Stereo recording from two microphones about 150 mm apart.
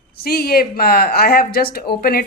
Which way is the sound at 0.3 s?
90° left.